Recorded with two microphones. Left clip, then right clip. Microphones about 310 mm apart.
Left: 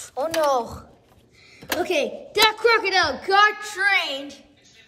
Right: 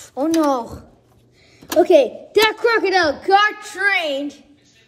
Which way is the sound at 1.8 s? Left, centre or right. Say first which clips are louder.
Right 11 dB; centre.